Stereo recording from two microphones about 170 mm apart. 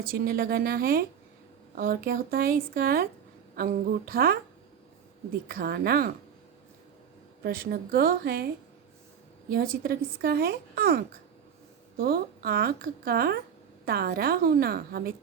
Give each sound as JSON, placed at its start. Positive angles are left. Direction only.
{"t": 0.0, "sound": "a woman's voice", "side_deg": -60}
{"t": 5.5, "sound": "a woman's voice", "side_deg": -60}
{"t": 7.4, "sound": "a woman's voice", "side_deg": -60}
{"t": 9.5, "sound": "a woman's voice", "side_deg": -60}